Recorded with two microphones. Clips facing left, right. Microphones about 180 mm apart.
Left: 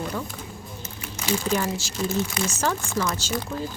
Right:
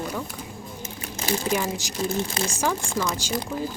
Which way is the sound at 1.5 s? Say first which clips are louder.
Even; 15° right (ahead or behind).